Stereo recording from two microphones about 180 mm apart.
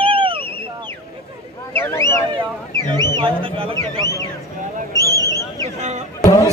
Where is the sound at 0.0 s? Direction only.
30° right (ahead or behind).